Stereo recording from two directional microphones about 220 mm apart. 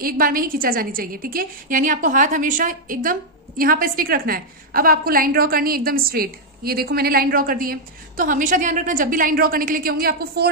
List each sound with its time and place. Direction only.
0.0 s a woman's voice: 40° right (ahead or behind)